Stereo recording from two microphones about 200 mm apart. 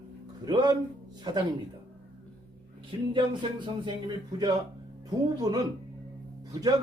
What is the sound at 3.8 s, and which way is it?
A man's voice, 20° right (ahead or behind).